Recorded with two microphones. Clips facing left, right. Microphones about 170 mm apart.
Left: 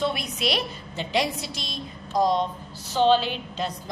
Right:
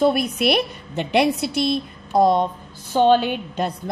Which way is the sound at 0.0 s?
55° right (ahead or behind).